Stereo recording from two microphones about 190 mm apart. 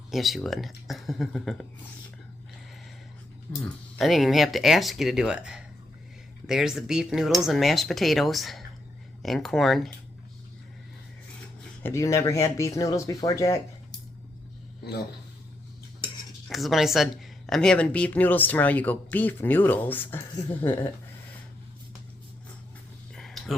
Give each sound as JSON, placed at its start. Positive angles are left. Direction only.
{"t": 0.1, "sound": "speech", "side_deg": 0}
{"t": 3.9, "sound": "speech", "side_deg": 0}
{"t": 11.8, "sound": "speech", "side_deg": 15}
{"t": 16.5, "sound": "speech", "side_deg": 0}
{"t": 23.1, "sound": "a sound", "side_deg": 0}